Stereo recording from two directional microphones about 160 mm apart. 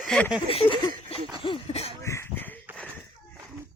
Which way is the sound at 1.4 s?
40° left (ahead or behind).